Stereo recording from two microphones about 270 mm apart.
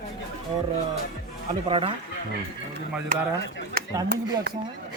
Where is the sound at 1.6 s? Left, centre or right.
Centre.